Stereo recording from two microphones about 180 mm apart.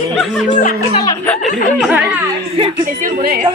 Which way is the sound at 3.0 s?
50° right (ahead or behind).